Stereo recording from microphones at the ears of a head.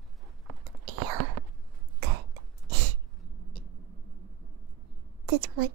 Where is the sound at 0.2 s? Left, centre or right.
Right.